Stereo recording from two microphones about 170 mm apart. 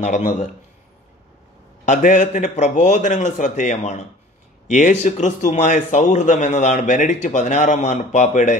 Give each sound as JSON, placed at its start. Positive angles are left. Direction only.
{"t": 0.0, "sound": "a man's voice", "side_deg": 45}
{"t": 1.9, "sound": "a man's voice", "side_deg": 50}